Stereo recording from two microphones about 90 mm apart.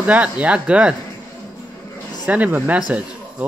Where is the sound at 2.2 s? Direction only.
15° right (ahead or behind).